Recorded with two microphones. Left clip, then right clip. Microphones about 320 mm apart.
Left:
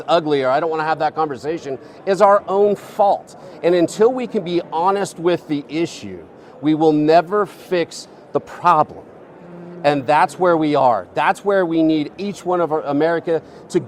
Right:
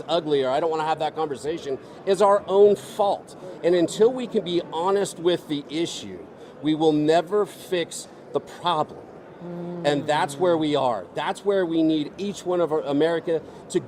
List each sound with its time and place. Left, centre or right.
0.0 s speech: left